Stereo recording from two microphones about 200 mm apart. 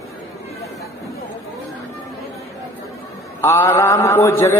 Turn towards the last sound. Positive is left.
turn(degrees=15)  # may be behind; listen again after turning